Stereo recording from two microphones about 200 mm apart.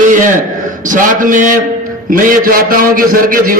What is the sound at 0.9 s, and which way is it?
A man's voice, 40° right (ahead or behind).